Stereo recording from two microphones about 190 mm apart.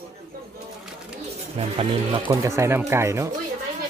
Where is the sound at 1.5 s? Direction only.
30° right (ahead or behind).